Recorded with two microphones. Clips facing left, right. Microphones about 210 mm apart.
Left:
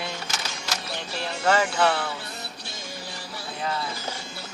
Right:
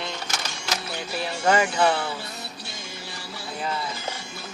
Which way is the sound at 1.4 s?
10° right (ahead or behind).